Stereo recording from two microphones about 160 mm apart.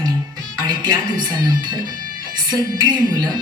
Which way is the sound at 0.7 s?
25° right (ahead or behind).